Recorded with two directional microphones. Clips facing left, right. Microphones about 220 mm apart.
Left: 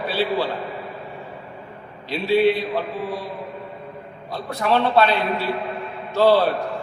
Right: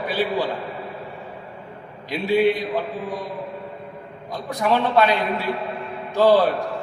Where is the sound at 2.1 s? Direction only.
15° right (ahead or behind).